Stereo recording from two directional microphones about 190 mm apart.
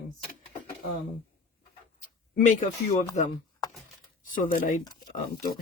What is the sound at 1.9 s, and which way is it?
Speech, 40° left (ahead or behind).